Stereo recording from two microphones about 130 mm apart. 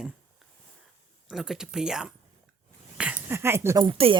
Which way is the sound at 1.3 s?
5° right (ahead or behind).